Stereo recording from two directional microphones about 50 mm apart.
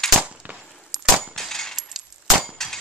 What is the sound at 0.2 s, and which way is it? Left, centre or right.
Gunshot, right.